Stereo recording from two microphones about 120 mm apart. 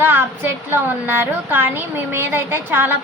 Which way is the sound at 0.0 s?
15° right (ahead or behind).